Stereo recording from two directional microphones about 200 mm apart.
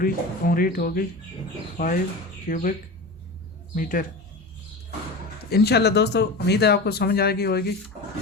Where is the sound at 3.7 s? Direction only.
45° left (ahead or behind).